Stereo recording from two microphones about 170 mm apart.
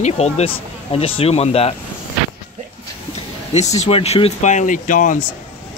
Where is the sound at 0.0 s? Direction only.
40° left (ahead or behind).